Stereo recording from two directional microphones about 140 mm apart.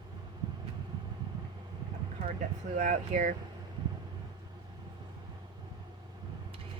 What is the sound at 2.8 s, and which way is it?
Speech, 60° right (ahead or behind).